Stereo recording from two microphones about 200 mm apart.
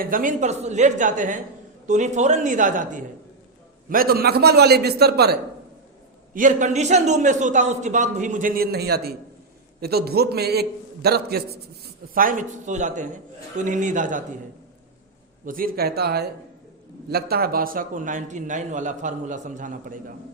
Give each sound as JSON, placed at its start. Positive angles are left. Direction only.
{"t": 0.0, "sound": "a man's voice", "side_deg": -45}
{"t": 6.3, "sound": "a man's voice", "side_deg": -40}
{"t": 15.4, "sound": "a man's voice", "side_deg": -45}